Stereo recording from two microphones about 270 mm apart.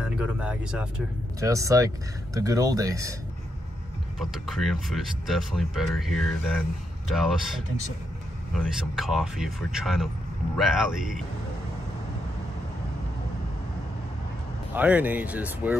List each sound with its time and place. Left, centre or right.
0.0 s speech: centre
4.2 s speech: centre
14.7 s speech: centre